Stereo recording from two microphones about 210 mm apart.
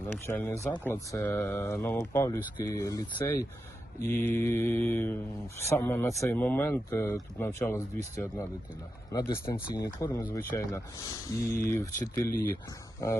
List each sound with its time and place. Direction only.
0.1 s speech: 10° left (ahead or behind)